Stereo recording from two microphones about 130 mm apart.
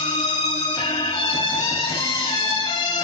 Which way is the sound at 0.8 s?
35° left (ahead or behind).